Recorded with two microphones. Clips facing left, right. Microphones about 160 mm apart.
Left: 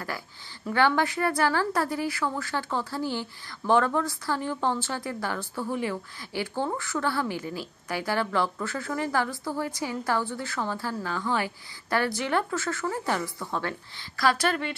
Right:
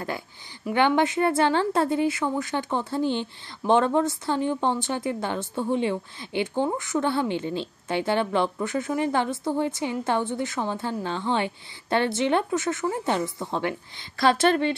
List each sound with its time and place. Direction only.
0.7 s a woman's voice: 20° right (ahead or behind)